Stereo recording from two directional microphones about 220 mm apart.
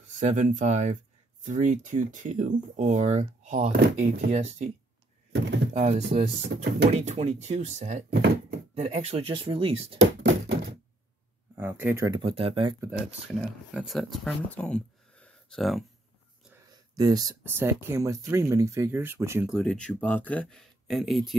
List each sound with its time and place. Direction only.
0.2 s speech: 35° right (ahead or behind)
5.3 s speech: 55° right (ahead or behind)
5.7 s speech: 35° right (ahead or behind)
8.1 s speech: 45° right (ahead or behind)
8.7 s speech: 25° right (ahead or behind)
9.9 s thunk: 55° right (ahead or behind)
11.5 s speech: 10° right (ahead or behind); by 12.7 s 25° right (ahead or behind)
13.7 s speech: centre (ahead or behind)
16.9 s speech: 15° right (ahead or behind)
19.5 s speech: centre (ahead or behind)